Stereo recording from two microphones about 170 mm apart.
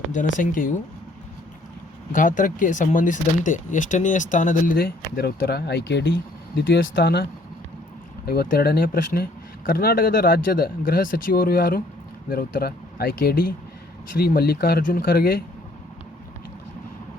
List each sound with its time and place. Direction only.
0.3 s speech: 55° left (ahead or behind)
2.1 s speech: 50° left (ahead or behind); by 6.1 s 80° left
6.6 s speech: 65° left (ahead or behind)
8.3 s speech: 65° left (ahead or behind)